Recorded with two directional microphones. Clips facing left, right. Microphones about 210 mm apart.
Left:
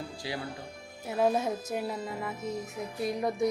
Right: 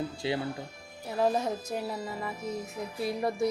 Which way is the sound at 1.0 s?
5° left (ahead or behind).